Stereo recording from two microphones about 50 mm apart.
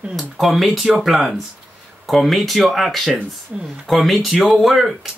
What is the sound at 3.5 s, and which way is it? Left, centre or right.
Speech, centre.